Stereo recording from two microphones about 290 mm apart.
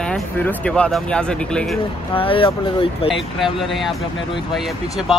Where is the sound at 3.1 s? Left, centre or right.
Centre.